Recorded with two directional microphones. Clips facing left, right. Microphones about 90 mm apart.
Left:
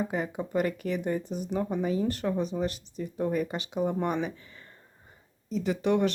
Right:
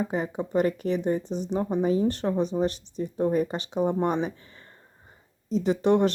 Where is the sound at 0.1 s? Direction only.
30° right (ahead or behind).